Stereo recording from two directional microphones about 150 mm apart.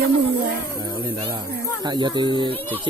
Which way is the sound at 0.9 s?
30° right (ahead or behind).